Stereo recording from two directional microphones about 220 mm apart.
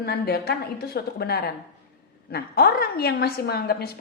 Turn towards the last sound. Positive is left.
turn(degrees=45)  # may be behind; listen again after turning